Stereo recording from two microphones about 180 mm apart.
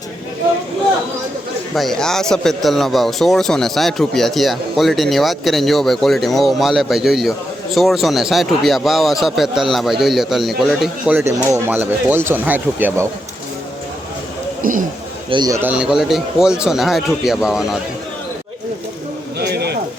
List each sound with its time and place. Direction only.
1.7 s speech: centre (ahead or behind)
11.2 s speech: 15° right (ahead or behind)
14.6 s speech: 50° right (ahead or behind)
15.3 s speech: 20° right (ahead or behind); by 17.7 s 5° right (ahead or behind)
19.4 s bird: 65° right (ahead or behind)